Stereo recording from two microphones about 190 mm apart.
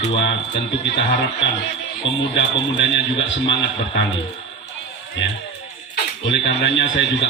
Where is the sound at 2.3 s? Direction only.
75° left (ahead or behind).